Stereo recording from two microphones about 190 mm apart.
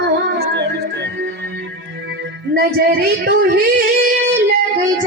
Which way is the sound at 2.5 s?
55° right (ahead or behind).